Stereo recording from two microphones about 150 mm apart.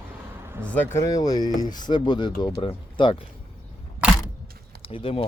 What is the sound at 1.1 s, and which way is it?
Speech, 25° left (ahead or behind).